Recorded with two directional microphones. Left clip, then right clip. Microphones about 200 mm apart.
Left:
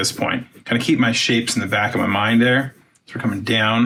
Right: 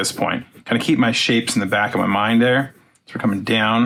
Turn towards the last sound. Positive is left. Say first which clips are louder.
# even
turn(degrees=-15)  # may be behind; listen again after turning